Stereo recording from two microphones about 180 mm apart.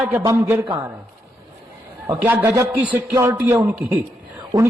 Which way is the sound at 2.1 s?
10° right (ahead or behind).